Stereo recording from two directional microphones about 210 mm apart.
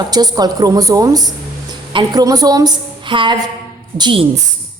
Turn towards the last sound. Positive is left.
turn(degrees=-25)  # may be behind; listen again after turning